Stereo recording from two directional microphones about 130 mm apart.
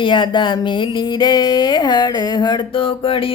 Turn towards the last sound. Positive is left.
turn(degrees=45)  # may be behind; listen again after turning